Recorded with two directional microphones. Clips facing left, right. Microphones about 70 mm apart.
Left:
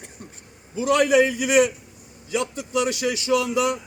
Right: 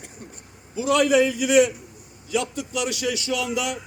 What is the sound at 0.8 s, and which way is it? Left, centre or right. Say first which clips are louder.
A man's voice: left 1 dB; left.